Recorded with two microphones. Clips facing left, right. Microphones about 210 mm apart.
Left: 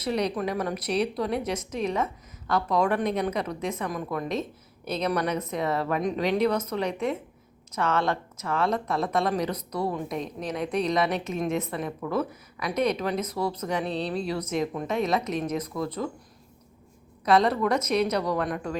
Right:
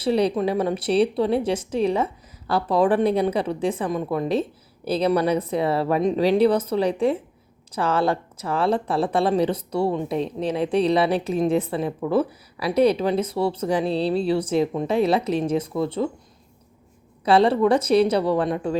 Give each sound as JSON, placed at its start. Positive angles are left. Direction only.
{"t": 0.0, "sound": "speech", "side_deg": -30}
{"t": 17.2, "sound": "speech", "side_deg": -30}